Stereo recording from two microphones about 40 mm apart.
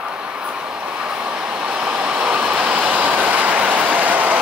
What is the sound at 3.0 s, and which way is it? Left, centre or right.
Vehicle, right.